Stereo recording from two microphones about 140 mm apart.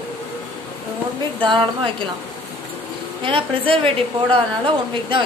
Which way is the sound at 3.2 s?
40° right (ahead or behind).